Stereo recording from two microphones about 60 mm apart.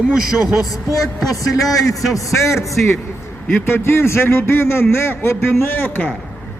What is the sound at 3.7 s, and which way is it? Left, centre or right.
A man's voice, left.